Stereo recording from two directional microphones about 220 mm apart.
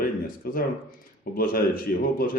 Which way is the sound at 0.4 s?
45° left (ahead or behind).